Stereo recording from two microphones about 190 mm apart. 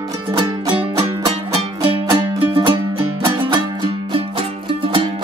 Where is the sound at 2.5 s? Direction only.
25° right (ahead or behind).